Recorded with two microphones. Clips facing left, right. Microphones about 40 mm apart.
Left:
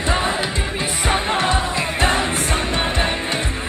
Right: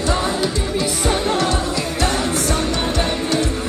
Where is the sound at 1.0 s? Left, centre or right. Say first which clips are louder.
Left 1 dB; left.